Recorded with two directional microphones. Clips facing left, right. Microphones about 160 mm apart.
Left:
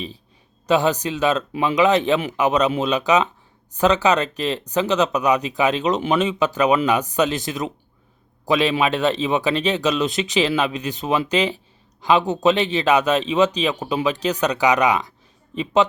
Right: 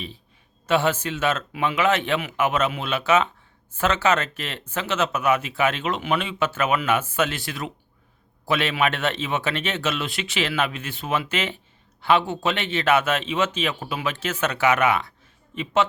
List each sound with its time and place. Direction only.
0.7 s speech: 15° left (ahead or behind)
2.1 s a man's voice: 35° left (ahead or behind)
2.4 s speech: 15° left (ahead or behind)